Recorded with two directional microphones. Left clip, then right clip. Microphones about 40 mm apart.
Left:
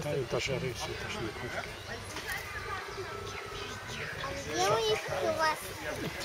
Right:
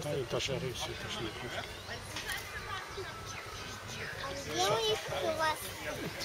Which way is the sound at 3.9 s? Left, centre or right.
Right.